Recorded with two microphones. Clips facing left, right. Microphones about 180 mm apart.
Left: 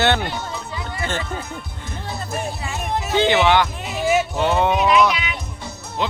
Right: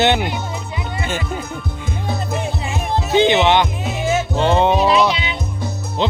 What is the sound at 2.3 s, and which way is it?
Music, 20° right (ahead or behind).